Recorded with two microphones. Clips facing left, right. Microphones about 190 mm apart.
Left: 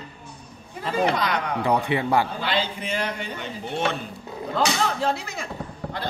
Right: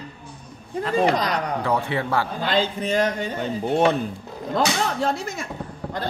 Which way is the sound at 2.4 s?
45° right (ahead or behind).